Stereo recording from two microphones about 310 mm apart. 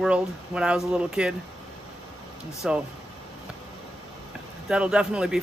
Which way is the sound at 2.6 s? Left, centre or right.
Centre.